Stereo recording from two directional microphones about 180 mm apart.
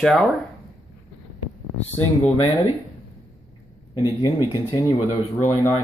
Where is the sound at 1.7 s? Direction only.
35° left (ahead or behind).